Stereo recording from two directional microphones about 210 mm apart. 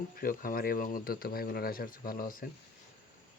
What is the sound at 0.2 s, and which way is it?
Speech, 45° left (ahead or behind).